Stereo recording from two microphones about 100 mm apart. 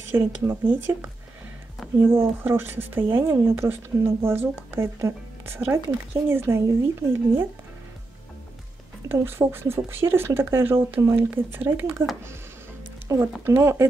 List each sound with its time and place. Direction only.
0.1 s speech: 20° right (ahead or behind)
9.1 s speech: 25° right (ahead or behind)
13.1 s speech: 30° right (ahead or behind)